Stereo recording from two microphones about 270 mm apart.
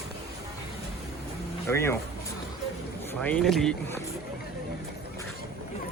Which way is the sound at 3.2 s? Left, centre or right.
Centre.